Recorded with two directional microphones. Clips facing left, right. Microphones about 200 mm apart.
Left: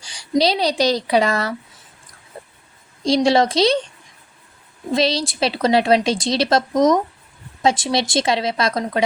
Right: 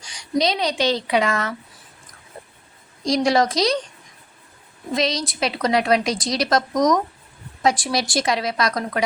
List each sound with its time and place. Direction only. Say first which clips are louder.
0.0 s speech: left 3 dB; 30° left (ahead or behind)
3.2 s a woman's voice: left 3 dB; 30° left (ahead or behind)
4.9 s a woman's voice: left 3 dB; 30° left (ahead or behind)